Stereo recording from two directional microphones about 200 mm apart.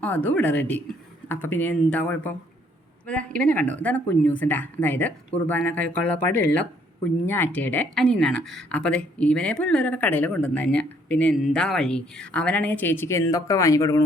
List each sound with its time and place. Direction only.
0.0 s speech: 10° left (ahead or behind)